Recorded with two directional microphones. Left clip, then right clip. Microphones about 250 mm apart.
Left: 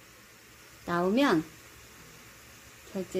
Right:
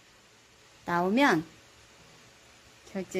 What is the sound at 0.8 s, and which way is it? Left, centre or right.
Speech, right.